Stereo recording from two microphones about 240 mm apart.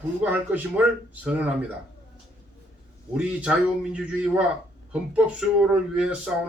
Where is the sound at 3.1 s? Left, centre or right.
Centre.